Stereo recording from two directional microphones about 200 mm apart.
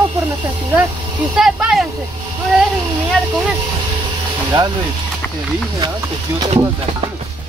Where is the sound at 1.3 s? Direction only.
Centre (ahead or behind).